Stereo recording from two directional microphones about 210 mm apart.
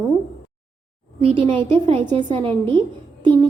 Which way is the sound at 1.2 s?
25° right (ahead or behind).